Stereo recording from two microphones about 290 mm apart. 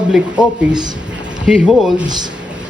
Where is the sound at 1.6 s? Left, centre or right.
Centre.